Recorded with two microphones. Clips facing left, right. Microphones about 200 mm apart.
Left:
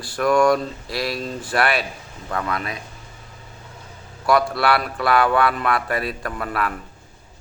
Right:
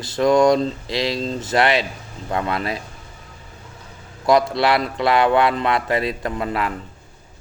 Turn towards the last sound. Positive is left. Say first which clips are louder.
# right 2 dB
turn(degrees=-20)  # may be behind; listen again after turning